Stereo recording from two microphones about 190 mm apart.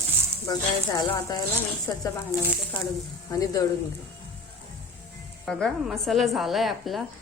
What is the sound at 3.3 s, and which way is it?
Speech, 20° left (ahead or behind).